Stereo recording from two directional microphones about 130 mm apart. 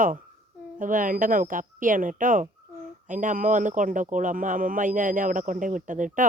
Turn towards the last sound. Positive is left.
turn(degrees=-85)